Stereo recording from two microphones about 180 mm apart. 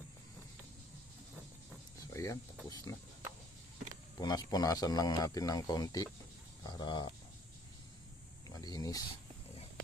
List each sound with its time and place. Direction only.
2.0 s vehicle: 20° left (ahead or behind)
2.6 s speech: 20° left (ahead or behind)
4.2 s speech: 20° left (ahead or behind)
8.4 s speech: 20° left (ahead or behind)